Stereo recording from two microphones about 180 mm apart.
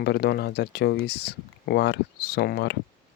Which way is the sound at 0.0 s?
65° left (ahead or behind).